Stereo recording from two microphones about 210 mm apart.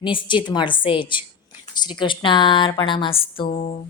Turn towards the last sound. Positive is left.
turn(degrees=25)  # may be behind; listen again after turning